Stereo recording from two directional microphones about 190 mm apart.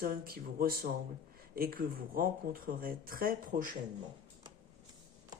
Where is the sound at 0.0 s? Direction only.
50° right (ahead or behind).